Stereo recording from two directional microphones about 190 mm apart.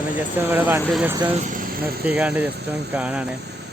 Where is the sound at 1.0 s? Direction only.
15° right (ahead or behind).